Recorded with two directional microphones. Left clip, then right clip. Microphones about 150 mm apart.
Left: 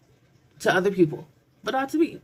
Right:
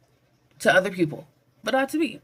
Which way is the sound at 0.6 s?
30° right (ahead or behind).